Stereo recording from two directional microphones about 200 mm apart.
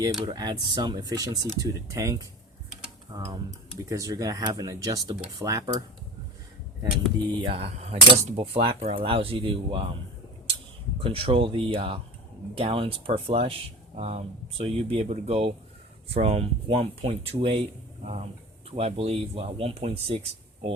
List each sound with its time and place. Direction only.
0.3 s speech: 20° right (ahead or behind)
7.4 s speech: 30° right (ahead or behind)
11.0 s speech: 30° right (ahead or behind)